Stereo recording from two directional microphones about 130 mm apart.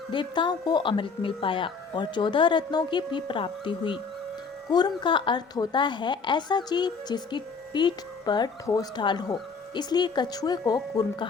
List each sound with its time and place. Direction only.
0.1 s a woman's voice: 35° left (ahead or behind)